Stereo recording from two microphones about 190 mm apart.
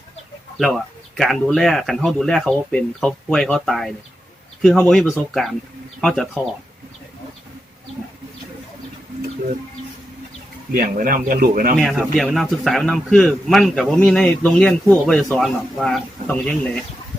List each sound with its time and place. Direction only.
0.5 s speech: centre (ahead or behind)
10.7 s speech: 45° right (ahead or behind)
11.9 s speech: centre (ahead or behind)